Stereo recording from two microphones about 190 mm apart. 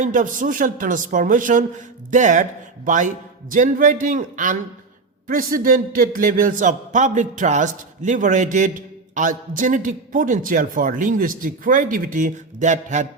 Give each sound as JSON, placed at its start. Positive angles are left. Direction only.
{"t": 0.0, "sound": "speech", "side_deg": -40}